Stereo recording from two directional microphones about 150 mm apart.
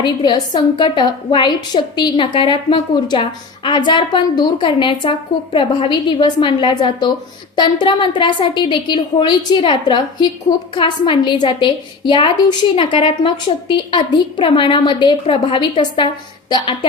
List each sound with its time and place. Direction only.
0.0 s a woman's voice: 30° left (ahead or behind)